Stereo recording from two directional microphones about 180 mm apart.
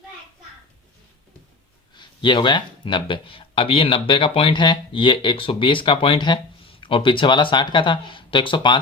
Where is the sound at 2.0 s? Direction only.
25° left (ahead or behind).